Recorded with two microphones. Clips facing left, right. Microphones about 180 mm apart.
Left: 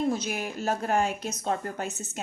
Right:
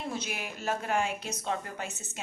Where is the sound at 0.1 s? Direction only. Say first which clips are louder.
Left 7 dB; 45° left (ahead or behind).